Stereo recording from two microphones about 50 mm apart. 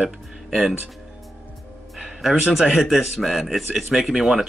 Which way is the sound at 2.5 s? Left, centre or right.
Centre.